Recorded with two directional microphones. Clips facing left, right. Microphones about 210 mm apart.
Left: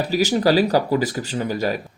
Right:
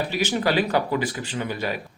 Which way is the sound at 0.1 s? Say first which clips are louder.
Left 9 dB; 40° left (ahead or behind).